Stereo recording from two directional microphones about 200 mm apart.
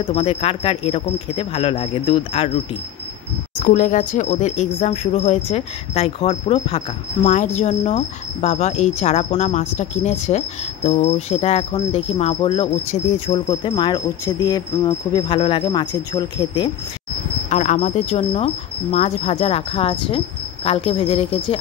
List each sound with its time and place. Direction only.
0.0 s speech: 30° left (ahead or behind)
3.7 s cricket: 40° left (ahead or behind)
13.3 s speech: 25° left (ahead or behind)
17.5 s cricket: 35° left (ahead or behind)
20.6 s speech: 30° left (ahead or behind)